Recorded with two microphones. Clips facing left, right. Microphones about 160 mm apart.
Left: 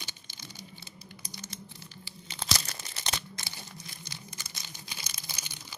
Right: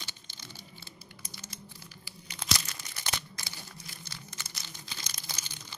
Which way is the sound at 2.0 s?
30° left (ahead or behind).